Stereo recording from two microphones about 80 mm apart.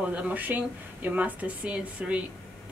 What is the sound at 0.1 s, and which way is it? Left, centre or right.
A woman's voice, centre.